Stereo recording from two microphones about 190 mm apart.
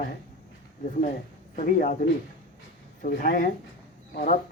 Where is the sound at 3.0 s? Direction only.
45° left (ahead or behind).